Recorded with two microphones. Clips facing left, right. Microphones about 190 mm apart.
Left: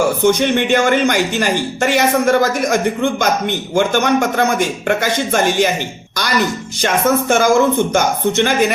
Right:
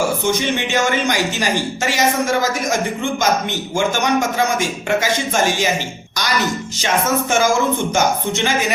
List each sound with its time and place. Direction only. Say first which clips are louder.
0.2 s speech: left 6 dB; 55° left (ahead or behind)
6.8 s speech: left 4 dB; 55° left (ahead or behind)